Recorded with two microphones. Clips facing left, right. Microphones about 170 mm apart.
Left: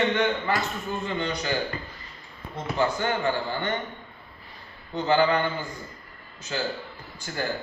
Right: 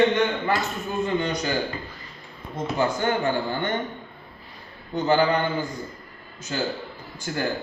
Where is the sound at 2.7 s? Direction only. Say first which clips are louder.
Right 2 dB; 45° right (ahead or behind).